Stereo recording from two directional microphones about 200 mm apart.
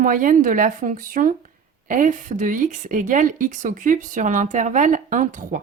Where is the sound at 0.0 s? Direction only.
40° right (ahead or behind).